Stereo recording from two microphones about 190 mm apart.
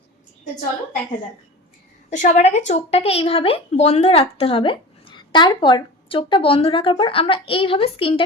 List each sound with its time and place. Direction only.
2.0 s a woman's voice: 40° left (ahead or behind)